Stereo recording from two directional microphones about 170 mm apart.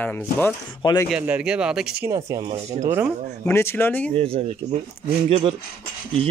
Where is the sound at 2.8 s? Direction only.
15° right (ahead or behind).